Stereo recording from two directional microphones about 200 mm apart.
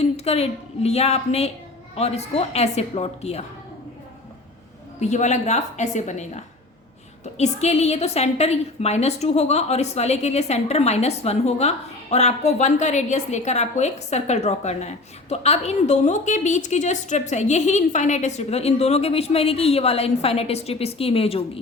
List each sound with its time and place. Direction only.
0.0 s a woman's voice: 30° left (ahead or behind)
4.9 s a woman's voice: 35° left (ahead or behind)